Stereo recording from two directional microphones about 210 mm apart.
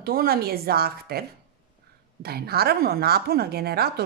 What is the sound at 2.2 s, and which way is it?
A woman's voice, 50° right (ahead or behind).